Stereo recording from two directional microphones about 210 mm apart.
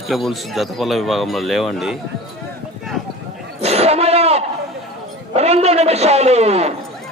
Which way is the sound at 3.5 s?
30° right (ahead or behind).